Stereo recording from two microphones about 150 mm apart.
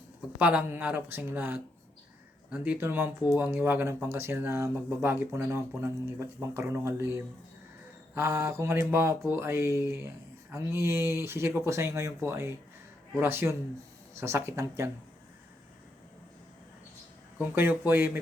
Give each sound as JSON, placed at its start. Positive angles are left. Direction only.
{"t": 0.3, "sound": "speech", "side_deg": -10}
{"t": 17.3, "sound": "speech", "side_deg": -10}